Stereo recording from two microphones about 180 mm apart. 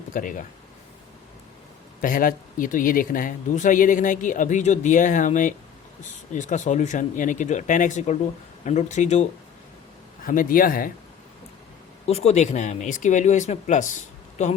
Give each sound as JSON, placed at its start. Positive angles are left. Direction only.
{"t": 0.1, "sound": "speech", "side_deg": 45}
{"t": 2.0, "sound": "speech", "side_deg": 50}
{"t": 10.2, "sound": "speech", "side_deg": 50}
{"t": 12.0, "sound": "speech", "side_deg": 35}